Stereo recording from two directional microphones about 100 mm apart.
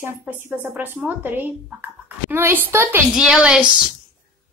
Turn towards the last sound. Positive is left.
turn(degrees=-10)  # may be behind; listen again after turning